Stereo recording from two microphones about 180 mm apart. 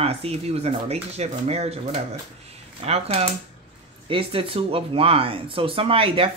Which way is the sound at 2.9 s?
35° right (ahead or behind).